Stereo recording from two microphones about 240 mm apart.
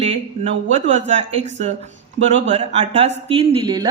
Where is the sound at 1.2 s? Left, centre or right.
Right.